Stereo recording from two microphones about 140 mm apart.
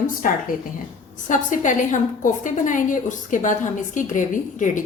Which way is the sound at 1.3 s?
65° left (ahead or behind).